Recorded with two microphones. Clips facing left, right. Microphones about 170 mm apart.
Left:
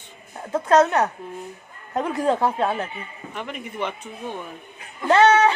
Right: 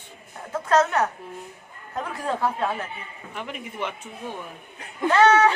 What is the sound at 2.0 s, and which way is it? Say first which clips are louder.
Speech: left 5 dB; 20° left (ahead or behind).